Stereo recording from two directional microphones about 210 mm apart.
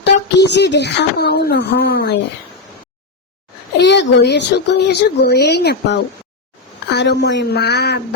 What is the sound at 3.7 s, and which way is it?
Child singing, 55° left (ahead or behind).